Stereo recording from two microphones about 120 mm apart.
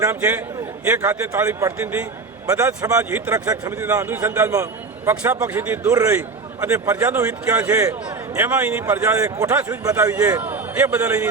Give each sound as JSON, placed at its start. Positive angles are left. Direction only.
{"t": 0.0, "sound": "a man's voice", "side_deg": -20}
{"t": 4.5, "sound": "a sound", "side_deg": -25}
{"t": 5.4, "sound": "a man's voice", "side_deg": -15}
{"t": 6.7, "sound": "a man's voice", "side_deg": -25}
{"t": 7.1, "sound": "a man's voice", "side_deg": -15}